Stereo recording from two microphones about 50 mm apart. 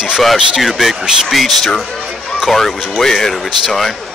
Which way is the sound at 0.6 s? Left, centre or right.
Centre.